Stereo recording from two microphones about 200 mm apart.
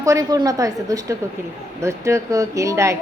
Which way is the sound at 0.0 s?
15° right (ahead or behind).